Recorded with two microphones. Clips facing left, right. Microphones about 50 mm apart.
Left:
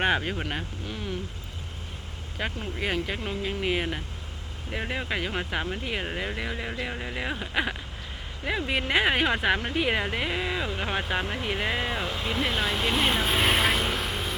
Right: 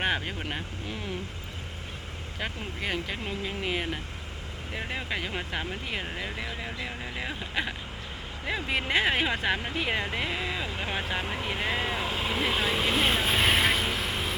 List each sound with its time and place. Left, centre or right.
0.0 s speech: centre
2.4 s speech: centre
12.1 s vehicle: centre